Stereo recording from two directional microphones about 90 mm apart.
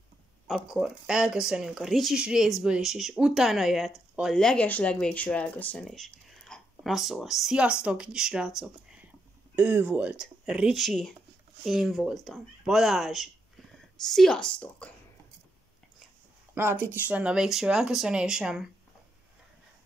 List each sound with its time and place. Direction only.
0.5 s speech: 5° right (ahead or behind); by 5.9 s 15° left (ahead or behind)
5.9 s speech: 5° left (ahead or behind)
10.8 s speech: 5° left (ahead or behind)
16.5 s speech: 25° right (ahead or behind); by 18.7 s 5° right (ahead or behind)